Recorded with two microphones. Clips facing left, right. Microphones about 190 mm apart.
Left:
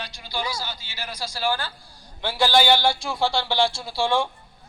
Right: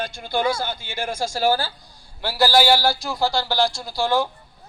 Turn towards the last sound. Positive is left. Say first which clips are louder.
# right 2 dB
turn(degrees=0)  # may be behind; listen again after turning